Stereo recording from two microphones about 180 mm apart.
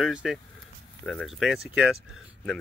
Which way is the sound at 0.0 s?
5° right (ahead or behind).